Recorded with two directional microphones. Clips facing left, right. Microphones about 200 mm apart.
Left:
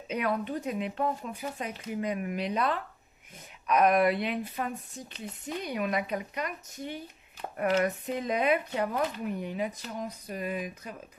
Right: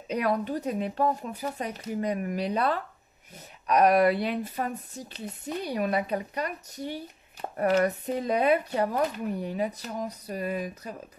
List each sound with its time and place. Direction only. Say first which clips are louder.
0.1 s speech: right 3 dB; 40° right (ahead or behind)